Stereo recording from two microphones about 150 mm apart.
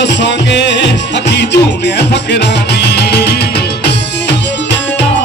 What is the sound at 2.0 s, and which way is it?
Music, 90° left.